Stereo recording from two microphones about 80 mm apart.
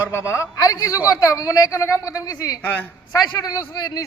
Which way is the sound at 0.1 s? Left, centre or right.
Left.